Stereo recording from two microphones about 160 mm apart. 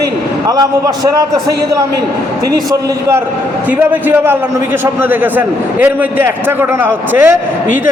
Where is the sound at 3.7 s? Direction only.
10° right (ahead or behind).